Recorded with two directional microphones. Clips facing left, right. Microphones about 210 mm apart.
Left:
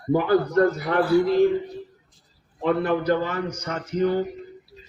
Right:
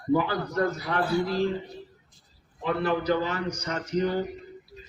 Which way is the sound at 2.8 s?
50° left (ahead or behind).